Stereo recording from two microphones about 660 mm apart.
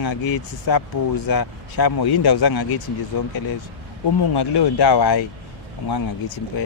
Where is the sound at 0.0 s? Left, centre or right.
Left.